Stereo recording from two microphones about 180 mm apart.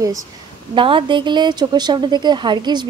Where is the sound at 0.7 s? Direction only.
30° right (ahead or behind).